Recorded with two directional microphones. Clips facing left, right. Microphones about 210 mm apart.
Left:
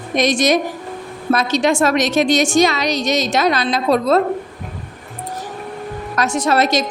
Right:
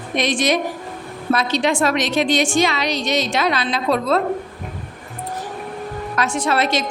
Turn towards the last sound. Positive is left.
turn(degrees=40)  # may be behind; listen again after turning